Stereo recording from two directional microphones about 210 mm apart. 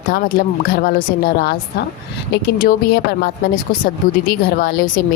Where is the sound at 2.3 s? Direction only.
55° left (ahead or behind).